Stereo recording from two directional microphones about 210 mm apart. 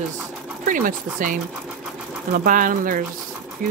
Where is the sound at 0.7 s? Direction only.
40° right (ahead or behind).